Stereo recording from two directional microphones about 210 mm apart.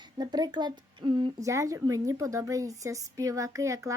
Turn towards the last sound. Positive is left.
turn(degrees=-15)  # may be behind; listen again after turning